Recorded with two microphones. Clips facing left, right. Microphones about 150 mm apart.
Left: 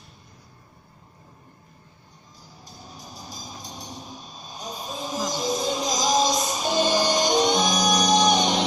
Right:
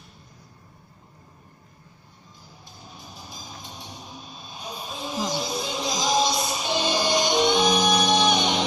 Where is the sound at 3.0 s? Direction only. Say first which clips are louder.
Left 2 dB; 40° left (ahead or behind).